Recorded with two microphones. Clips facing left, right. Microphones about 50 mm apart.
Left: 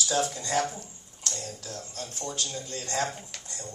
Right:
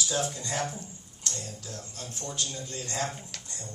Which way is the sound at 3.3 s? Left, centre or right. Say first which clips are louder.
Even; centre.